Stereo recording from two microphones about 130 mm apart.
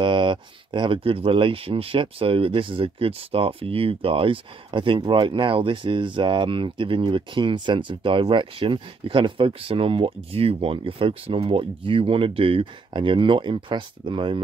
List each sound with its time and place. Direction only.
0.0 s speech: 40° right (ahead or behind)